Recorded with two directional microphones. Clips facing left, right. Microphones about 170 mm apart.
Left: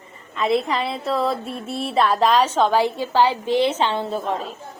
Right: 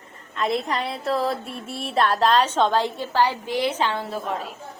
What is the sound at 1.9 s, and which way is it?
A woman's voice, centre (ahead or behind).